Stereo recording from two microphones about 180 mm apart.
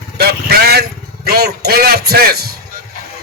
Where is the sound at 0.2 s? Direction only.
60° right (ahead or behind).